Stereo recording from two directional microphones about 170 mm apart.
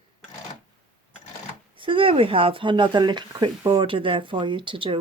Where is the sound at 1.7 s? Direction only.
30° right (ahead or behind).